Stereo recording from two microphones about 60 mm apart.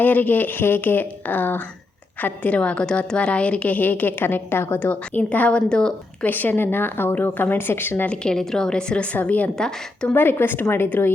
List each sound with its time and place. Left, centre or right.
0.0 s a woman's voice: left
4.8 s a woman's voice: left
6.2 s speech: left
8.0 s a woman's voice: centre
9.1 s a woman's voice: left
9.6 s a woman's voice: centre
10.2 s a woman's voice: left